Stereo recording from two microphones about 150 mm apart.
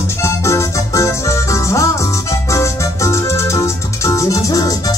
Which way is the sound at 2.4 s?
20° left (ahead or behind).